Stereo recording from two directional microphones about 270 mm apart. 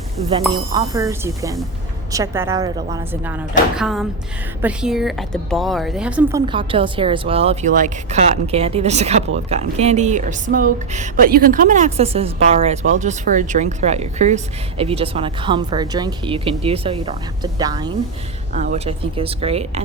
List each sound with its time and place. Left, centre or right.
0.5 s a woman's voice: centre
18.5 s speech: right